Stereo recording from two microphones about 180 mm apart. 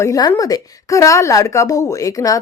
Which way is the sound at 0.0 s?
20° left (ahead or behind).